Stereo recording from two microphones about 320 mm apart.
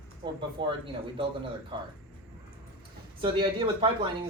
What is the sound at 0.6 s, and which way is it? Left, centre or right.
Speech, centre.